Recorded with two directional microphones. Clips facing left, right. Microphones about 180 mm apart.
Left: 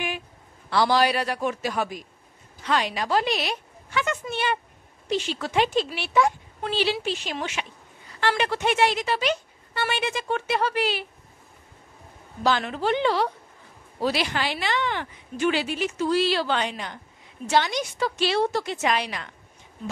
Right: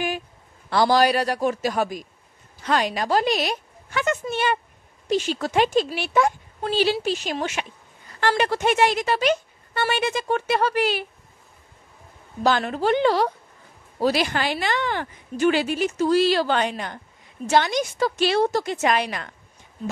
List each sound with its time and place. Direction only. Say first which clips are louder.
0.7 s a man's voice: right 3 dB; 45° right (ahead or behind)
12.4 s speech: right 3 dB; 45° right (ahead or behind)